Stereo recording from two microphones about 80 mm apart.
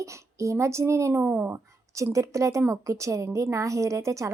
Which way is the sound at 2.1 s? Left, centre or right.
Right.